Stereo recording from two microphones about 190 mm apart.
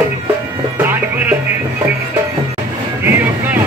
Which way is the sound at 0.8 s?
10° right (ahead or behind).